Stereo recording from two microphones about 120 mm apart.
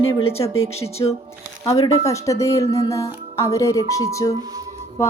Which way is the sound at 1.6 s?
25° left (ahead or behind).